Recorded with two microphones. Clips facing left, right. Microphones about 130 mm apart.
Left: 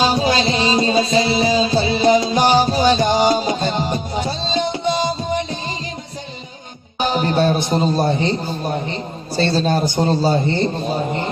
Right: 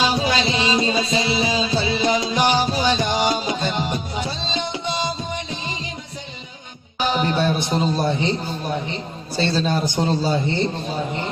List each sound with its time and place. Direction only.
0.0 s music: 45° left (ahead or behind)
7.0 s music: 45° left (ahead or behind)
9.3 s a man's voice: 45° left (ahead or behind)